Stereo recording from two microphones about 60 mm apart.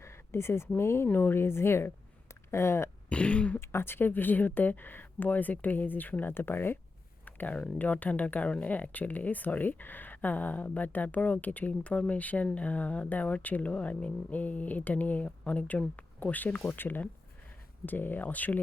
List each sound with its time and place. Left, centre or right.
0.0 s a sound: left
0.8 s a woman's voice: left
3.1 s speech: centre
3.6 s speech: left